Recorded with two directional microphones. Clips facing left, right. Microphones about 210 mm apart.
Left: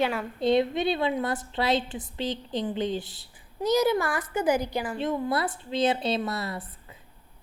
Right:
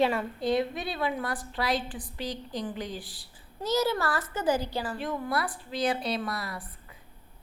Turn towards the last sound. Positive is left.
turn(degrees=25)  # may be behind; listen again after turning